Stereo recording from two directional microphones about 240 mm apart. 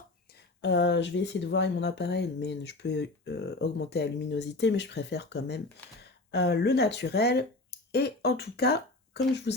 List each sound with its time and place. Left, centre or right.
0.6 s speech: left